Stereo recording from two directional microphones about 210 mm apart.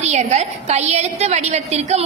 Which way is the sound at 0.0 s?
30° right (ahead or behind).